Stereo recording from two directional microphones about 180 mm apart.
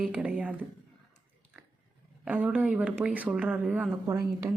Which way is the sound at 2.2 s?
5° right (ahead or behind).